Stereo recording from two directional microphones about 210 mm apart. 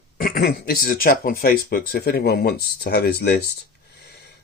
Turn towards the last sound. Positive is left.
turn(degrees=50)  # may be behind; listen again after turning